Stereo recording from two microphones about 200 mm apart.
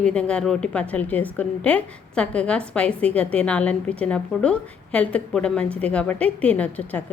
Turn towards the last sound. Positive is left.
turn(degrees=5)  # may be behind; listen again after turning